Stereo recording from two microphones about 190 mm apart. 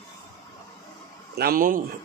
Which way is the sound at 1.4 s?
50° right (ahead or behind).